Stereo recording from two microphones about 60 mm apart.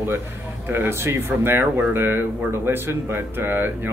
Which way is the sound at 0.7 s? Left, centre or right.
Right.